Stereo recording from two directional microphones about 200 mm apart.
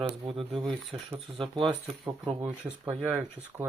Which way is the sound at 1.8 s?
Centre (ahead or behind).